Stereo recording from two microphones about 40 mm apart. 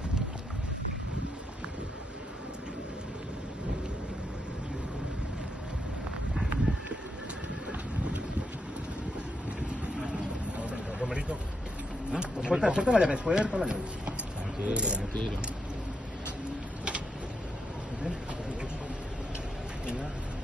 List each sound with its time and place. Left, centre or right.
10.7 s vehicle: right
12.1 s speech: right